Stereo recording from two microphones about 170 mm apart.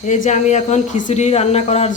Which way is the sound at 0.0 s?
45° left (ahead or behind).